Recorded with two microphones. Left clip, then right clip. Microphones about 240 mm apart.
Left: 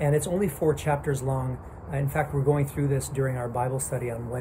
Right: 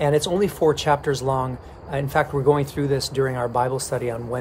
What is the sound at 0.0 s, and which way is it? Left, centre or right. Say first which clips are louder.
Speech: right 6 dB; centre.